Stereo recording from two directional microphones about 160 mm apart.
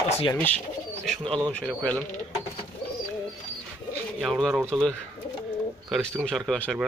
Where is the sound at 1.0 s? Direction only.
5° left (ahead or behind).